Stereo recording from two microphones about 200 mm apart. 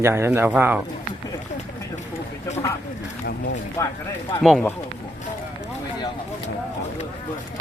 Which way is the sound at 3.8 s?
15° left (ahead or behind).